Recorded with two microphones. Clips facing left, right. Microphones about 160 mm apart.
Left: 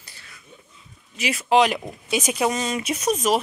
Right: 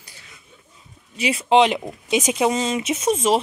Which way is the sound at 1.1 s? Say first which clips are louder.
Right 2 dB; 30° right (ahead or behind).